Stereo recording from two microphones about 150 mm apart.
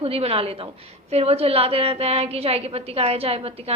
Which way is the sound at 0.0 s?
40° right (ahead or behind).